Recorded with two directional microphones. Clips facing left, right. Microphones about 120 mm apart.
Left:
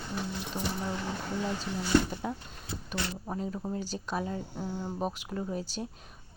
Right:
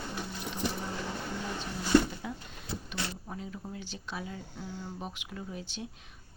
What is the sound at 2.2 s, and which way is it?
Speech, 40° left (ahead or behind).